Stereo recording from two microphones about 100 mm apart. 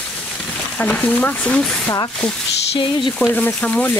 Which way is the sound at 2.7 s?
55° left (ahead or behind).